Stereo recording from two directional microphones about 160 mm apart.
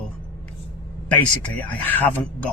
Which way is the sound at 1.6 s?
10° left (ahead or behind).